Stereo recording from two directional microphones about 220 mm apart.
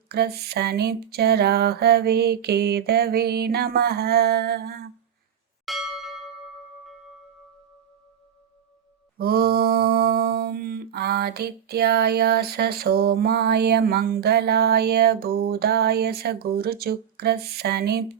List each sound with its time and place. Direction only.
0.1 s mantra: 45° right (ahead or behind)
5.6 s bell: centre (ahead or behind)
9.1 s mantra: 45° right (ahead or behind)